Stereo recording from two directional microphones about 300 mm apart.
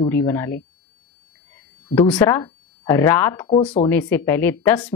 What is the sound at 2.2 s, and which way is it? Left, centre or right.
A woman's voice, centre.